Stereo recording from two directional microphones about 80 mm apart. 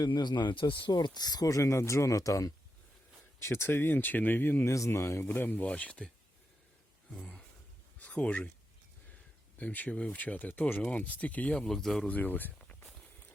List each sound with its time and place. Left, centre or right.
0.0 s speech: left
3.4 s speech: left
4.6 s speech: left; by 6.1 s centre
7.2 s speech: centre
7.9 s a sound: centre
9.6 s speech: centre
12.0 s speech: left